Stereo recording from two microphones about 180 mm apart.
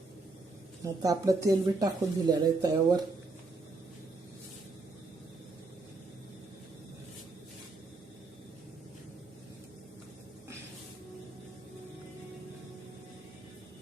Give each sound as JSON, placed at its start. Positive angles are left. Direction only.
{"t": 0.9, "sound": "speech", "side_deg": -20}